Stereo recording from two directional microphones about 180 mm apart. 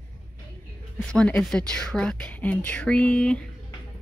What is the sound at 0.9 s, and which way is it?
A woman's voice, 5° left (ahead or behind).